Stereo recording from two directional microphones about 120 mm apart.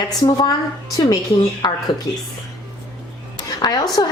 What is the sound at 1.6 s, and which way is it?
Speech, 35° left (ahead or behind).